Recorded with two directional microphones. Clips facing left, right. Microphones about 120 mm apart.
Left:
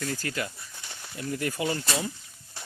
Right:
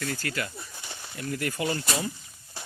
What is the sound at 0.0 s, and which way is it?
Speech, 15° left (ahead or behind).